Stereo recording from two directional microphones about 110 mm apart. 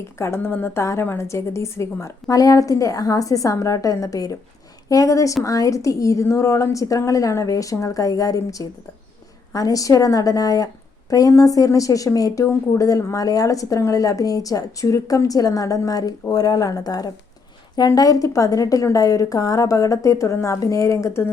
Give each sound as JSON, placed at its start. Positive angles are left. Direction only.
{"t": 0.2, "sound": "a woman's voice", "side_deg": 25}